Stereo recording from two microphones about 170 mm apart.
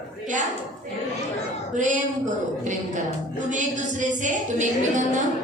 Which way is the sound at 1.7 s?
45° right (ahead or behind).